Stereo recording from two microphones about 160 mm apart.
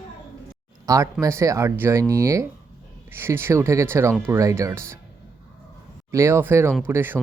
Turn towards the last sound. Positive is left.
turn(degrees=-15)  # may be behind; listen again after turning